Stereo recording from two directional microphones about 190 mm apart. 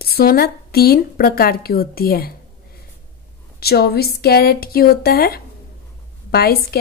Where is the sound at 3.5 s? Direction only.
55° left (ahead or behind).